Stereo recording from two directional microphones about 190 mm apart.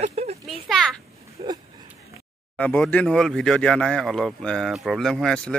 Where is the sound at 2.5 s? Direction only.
5° left (ahead or behind).